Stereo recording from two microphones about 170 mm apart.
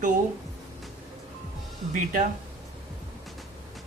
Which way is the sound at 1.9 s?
50° right (ahead or behind).